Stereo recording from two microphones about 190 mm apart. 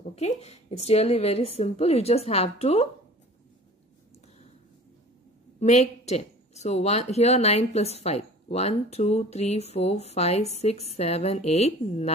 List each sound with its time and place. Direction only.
0.1 s a woman's voice: 35° left (ahead or behind)
5.6 s a woman's voice: 35° left (ahead or behind)